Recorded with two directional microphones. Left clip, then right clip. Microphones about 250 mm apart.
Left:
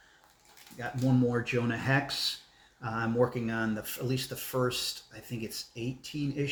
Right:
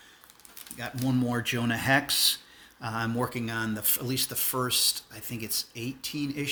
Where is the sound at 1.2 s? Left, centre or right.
Right.